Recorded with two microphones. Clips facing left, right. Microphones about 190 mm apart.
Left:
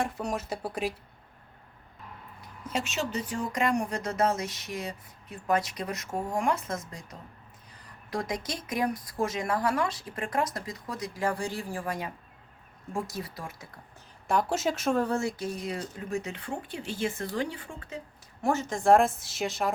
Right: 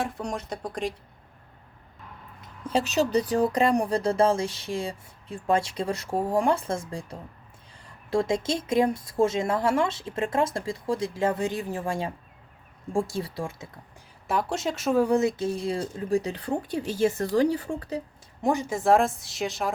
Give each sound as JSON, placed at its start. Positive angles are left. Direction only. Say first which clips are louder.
{"t": 0.0, "sound": "a woman's voice", "louder": "even", "side_deg": 0}
{"t": 2.4, "sound": "speech", "louder": "right 7 dB", "side_deg": -30}
{"t": 14.3, "sound": "a woman's voice", "louder": "even", "side_deg": 0}
{"t": 15.0, "sound": "speech", "louder": "right 6 dB", "side_deg": -20}
{"t": 18.4, "sound": "a woman's voice", "louder": "right 1 dB", "side_deg": -15}